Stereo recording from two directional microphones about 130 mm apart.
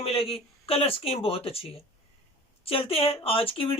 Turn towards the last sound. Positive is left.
turn(degrees=45)  # may be behind; listen again after turning